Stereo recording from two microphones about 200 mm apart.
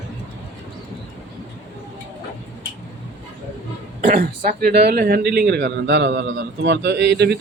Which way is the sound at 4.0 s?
40° right (ahead or behind).